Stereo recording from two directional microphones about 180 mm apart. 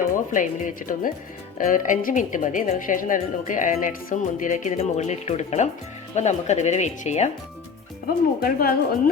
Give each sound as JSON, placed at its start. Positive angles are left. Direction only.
{"t": 0.3, "sound": "a woman's voice", "side_deg": 45}
{"t": 8.0, "sound": "a woman's voice", "side_deg": 55}